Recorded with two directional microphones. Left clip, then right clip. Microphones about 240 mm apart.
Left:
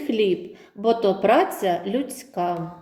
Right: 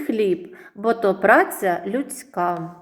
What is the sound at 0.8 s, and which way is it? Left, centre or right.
Speech, right.